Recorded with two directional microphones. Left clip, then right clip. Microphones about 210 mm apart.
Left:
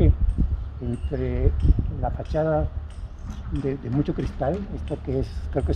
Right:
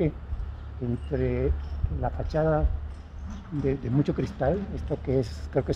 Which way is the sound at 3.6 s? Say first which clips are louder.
Even; 25° right (ahead or behind).